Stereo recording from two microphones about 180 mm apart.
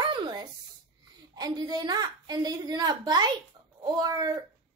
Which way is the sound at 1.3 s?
25° right (ahead or behind).